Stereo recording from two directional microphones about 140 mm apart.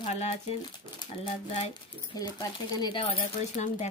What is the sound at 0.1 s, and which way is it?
Speech, 50° left (ahead or behind).